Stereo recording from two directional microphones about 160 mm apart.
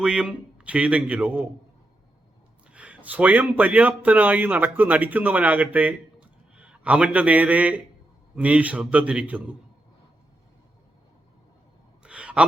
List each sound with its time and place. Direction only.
0.0 s a man's voice: 5° right (ahead or behind)
2.7 s a man's voice: 10° right (ahead or behind)
12.0 s sigh: 5° right (ahead or behind)